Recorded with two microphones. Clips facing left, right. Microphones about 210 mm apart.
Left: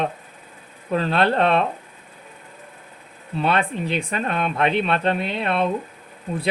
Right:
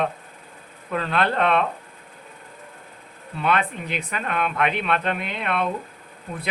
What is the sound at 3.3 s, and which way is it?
Speech, 30° left (ahead or behind).